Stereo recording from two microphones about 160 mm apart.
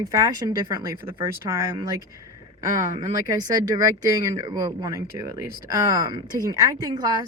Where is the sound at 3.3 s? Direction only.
25° right (ahead or behind).